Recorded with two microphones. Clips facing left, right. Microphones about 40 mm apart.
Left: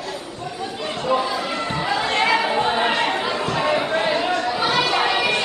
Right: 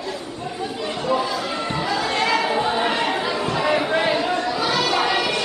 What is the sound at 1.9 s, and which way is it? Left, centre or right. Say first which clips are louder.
Chatter: left 2 dB; centre.